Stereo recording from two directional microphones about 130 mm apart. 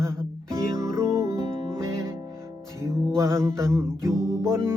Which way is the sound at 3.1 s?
20° right (ahead or behind).